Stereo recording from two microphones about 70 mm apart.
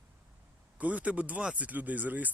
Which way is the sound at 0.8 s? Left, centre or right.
Right.